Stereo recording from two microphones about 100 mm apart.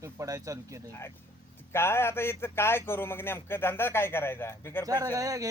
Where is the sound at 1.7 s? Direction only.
25° left (ahead or behind).